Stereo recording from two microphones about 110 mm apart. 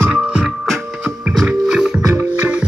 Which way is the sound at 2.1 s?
15° right (ahead or behind).